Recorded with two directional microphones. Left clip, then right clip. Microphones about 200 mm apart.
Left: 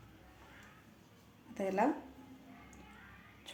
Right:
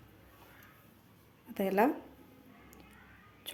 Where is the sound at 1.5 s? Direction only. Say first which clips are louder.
Right 4 dB; 45° right (ahead or behind).